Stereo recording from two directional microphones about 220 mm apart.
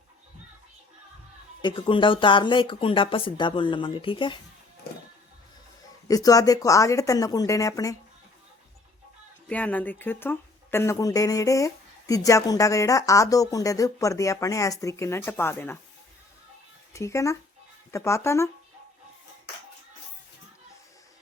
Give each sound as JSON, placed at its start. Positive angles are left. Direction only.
{"t": 1.6, "sound": "speech", "side_deg": 20}
{"t": 6.1, "sound": "speech", "side_deg": 15}
{"t": 9.5, "sound": "speech", "side_deg": 5}
{"t": 16.9, "sound": "speech", "side_deg": 15}